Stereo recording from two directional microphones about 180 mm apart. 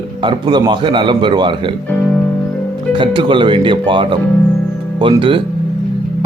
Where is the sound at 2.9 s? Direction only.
25° right (ahead or behind).